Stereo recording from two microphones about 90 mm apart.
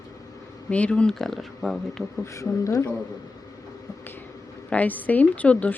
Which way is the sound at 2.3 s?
35° left (ahead or behind).